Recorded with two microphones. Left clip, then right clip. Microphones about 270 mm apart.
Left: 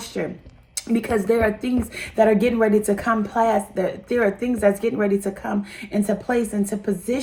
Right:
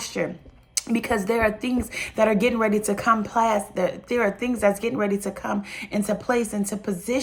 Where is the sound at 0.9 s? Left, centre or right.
Centre.